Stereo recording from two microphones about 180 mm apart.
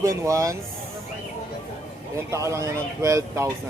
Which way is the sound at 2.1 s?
15° right (ahead or behind).